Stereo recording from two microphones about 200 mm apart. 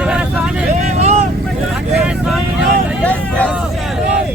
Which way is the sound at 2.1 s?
Centre (ahead or behind).